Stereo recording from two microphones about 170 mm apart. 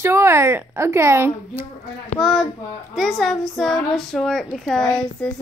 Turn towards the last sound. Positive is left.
turn(degrees=5)  # may be behind; listen again after turning